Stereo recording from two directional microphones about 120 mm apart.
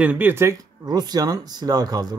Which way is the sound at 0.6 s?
35° right (ahead or behind).